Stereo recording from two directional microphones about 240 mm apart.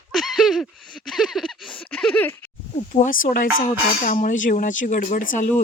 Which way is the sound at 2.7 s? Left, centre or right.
Left.